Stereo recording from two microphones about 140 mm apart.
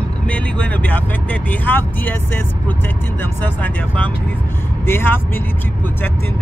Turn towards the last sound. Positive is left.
turn(degrees=15)  # may be behind; listen again after turning